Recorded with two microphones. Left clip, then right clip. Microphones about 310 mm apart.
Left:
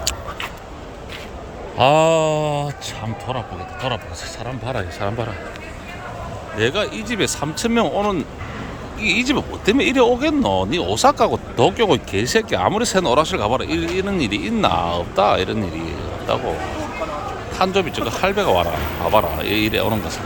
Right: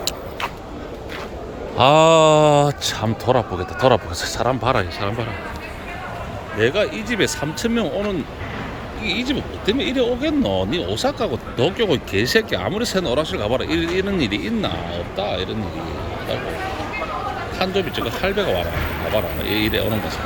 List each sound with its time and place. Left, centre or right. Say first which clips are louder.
1.8 s speech: right 2 dB; centre
6.6 s speech: right 1 dB; centre
17.6 s speech: left 4 dB; centre